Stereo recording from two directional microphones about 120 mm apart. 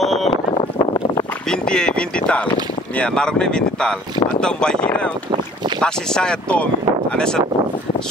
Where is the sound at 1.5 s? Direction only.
5° left (ahead or behind).